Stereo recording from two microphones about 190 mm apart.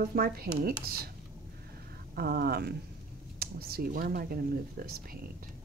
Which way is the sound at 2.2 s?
55° right (ahead or behind).